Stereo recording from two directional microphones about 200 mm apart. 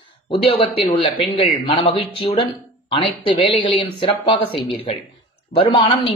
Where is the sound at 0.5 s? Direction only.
25° left (ahead or behind).